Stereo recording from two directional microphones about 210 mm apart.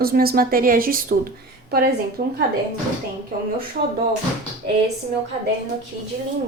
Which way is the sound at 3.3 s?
40° right (ahead or behind).